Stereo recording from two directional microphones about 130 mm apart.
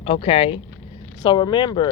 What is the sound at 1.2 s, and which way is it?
Speech, 35° left (ahead or behind).